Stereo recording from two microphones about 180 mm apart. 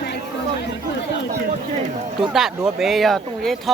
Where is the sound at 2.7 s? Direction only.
Centre (ahead or behind).